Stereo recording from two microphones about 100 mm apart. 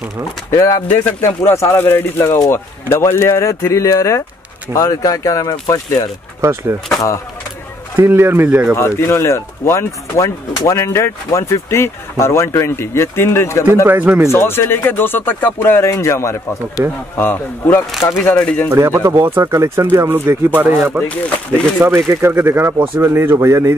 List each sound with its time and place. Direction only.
0.5 s speech: 35° left (ahead or behind)
6.4 s speech: 30° right (ahead or behind)
8.0 s speech: 20° right (ahead or behind)
8.7 s speech: 25° left (ahead or behind)
13.8 s speech: 20° right (ahead or behind)
14.3 s speech: 25° left (ahead or behind)
18.3 s speech: 10° left (ahead or behind)
18.7 s speech: 25° right (ahead or behind)